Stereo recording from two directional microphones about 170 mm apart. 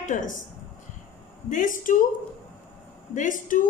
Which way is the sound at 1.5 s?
50° left (ahead or behind).